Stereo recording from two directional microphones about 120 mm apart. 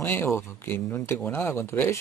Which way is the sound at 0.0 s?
20° left (ahead or behind).